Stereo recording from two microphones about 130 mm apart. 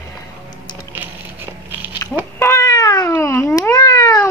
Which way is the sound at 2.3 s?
20° left (ahead or behind).